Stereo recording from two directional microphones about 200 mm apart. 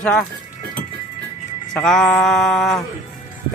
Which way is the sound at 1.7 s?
Centre (ahead or behind).